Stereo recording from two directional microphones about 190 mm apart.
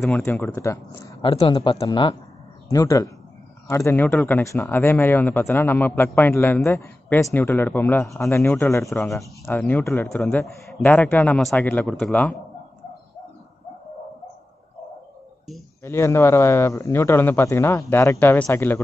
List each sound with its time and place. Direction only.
0.0 s speech: 5° left (ahead or behind)
1.2 s speech: 30° left (ahead or behind); by 12.4 s 10° left (ahead or behind)
15.8 s speech: 15° left (ahead or behind)